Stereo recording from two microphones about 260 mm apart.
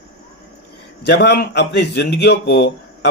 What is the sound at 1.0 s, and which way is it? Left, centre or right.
A man's voice, left.